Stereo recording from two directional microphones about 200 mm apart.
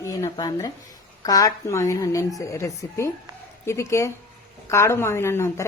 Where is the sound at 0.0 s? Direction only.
15° left (ahead or behind).